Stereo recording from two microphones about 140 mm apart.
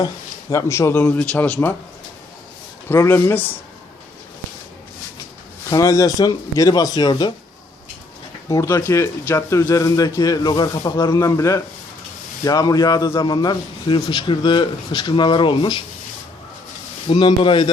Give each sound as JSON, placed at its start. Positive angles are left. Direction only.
{"t": 0.5, "sound": "a man's voice", "side_deg": 20}
{"t": 2.9, "sound": "a man's voice", "side_deg": 15}
{"t": 5.7, "sound": "speech", "side_deg": 25}
{"t": 8.4, "sound": "a man's voice", "side_deg": 20}
{"t": 17.2, "sound": "a man's voice", "side_deg": 35}